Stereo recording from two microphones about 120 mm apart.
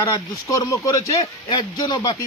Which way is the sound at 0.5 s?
25° left (ahead or behind).